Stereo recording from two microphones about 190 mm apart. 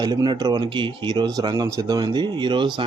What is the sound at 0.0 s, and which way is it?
Speech, 25° right (ahead or behind).